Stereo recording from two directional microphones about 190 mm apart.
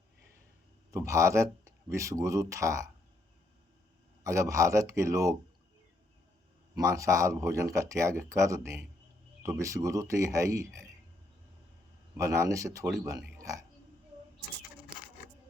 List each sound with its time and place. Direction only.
0.9 s speech: 15° right (ahead or behind)
4.2 s speech: 15° right (ahead or behind)
6.7 s speech: 15° right (ahead or behind)
12.1 s speech: 15° right (ahead or behind)